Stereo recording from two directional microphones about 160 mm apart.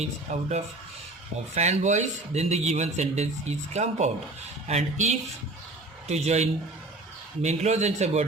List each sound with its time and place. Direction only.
0.0 s speech: 45° right (ahead or behind)